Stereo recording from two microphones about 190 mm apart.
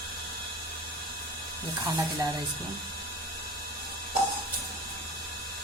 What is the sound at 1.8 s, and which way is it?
Speech, 20° right (ahead or behind).